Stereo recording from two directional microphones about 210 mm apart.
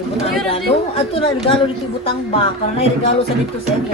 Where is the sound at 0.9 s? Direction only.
25° left (ahead or behind).